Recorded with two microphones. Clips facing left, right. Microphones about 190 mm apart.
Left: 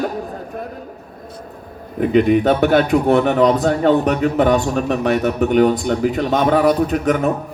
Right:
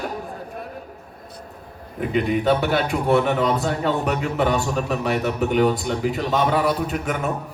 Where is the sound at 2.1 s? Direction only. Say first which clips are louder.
Left 6 dB; 45° left (ahead or behind).